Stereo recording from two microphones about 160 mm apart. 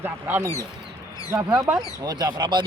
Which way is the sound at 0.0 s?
15° right (ahead or behind).